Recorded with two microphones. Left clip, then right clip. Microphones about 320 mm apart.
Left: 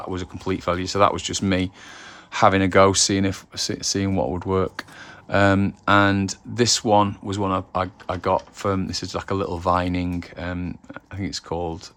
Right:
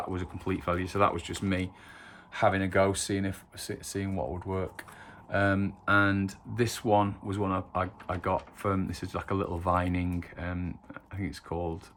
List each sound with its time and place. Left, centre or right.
0.1 s speech: centre